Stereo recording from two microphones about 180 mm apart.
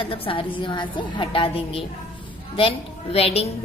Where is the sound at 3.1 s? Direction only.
35° left (ahead or behind).